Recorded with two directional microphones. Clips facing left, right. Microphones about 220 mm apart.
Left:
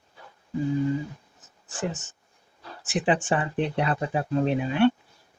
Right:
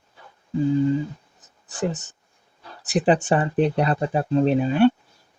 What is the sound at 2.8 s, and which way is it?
Speech, 40° right (ahead or behind).